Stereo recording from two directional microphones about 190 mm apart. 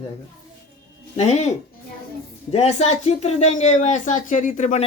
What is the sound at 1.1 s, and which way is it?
Speech, 35° left (ahead or behind).